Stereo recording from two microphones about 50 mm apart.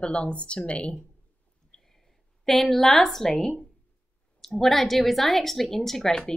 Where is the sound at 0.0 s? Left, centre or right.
Left.